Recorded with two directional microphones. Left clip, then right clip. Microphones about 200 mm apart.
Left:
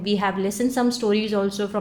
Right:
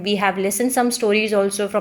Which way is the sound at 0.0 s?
15° right (ahead or behind).